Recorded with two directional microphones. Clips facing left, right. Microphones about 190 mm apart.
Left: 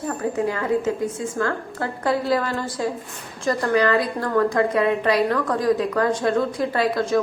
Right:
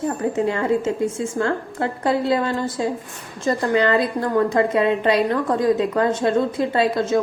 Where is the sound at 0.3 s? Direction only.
25° right (ahead or behind).